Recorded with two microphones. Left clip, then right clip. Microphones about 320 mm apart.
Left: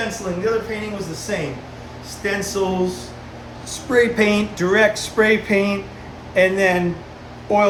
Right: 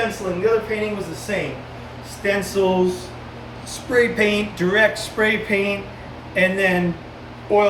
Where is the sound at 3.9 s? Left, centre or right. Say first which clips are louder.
Left 1 dB; centre.